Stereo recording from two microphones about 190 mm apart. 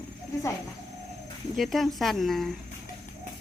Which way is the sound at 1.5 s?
Centre (ahead or behind).